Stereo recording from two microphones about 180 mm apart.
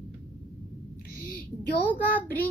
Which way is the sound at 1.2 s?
55° left (ahead or behind).